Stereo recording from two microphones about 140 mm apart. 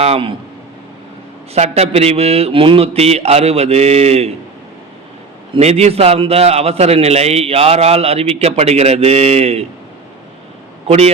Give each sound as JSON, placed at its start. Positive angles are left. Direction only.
{"t": 0.0, "sound": "a man's voice", "side_deg": -45}
{"t": 1.5, "sound": "a man's voice", "side_deg": -50}
{"t": 5.5, "sound": "a man's voice", "side_deg": -50}
{"t": 10.8, "sound": "a man's voice", "side_deg": -50}